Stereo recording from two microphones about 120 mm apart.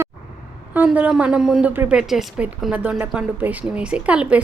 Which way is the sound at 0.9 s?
10° right (ahead or behind).